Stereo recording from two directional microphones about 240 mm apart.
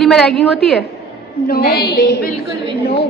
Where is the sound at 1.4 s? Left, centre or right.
Left.